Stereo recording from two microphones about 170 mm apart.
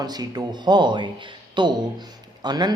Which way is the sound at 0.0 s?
25° right (ahead or behind).